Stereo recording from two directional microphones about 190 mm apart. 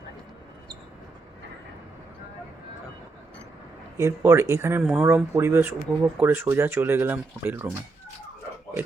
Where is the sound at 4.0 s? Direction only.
15° right (ahead or behind).